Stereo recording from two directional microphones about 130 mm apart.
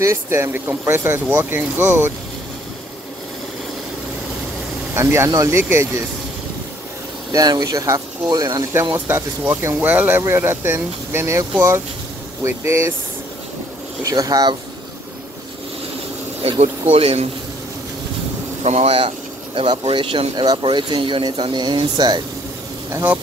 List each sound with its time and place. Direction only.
0.0 s speech: 20° right (ahead or behind)
4.9 s speech: 20° right (ahead or behind)
7.3 s speech: 30° right (ahead or behind)
14.0 s speech: 30° right (ahead or behind)
16.4 s a man's voice: 55° right (ahead or behind)
18.6 s speech: 55° right (ahead or behind); by 22.2 s 30° right (ahead or behind)
22.8 s speech: 20° right (ahead or behind)